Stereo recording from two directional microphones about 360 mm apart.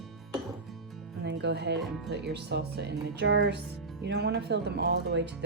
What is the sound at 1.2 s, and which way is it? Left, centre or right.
Speech, right.